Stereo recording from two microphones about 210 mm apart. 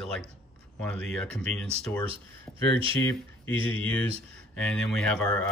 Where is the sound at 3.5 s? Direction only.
25° right (ahead or behind).